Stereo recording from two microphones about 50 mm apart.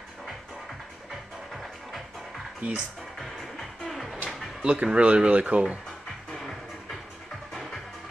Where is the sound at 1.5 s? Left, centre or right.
Centre.